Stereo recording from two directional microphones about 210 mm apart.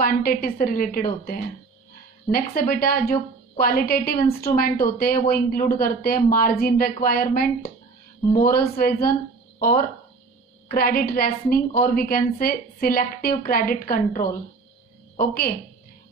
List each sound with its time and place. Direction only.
0.0 s a woman's voice: 45° left (ahead or behind)